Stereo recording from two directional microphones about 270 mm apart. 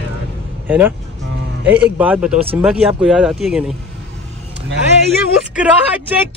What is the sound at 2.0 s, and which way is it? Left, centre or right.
Speech, centre.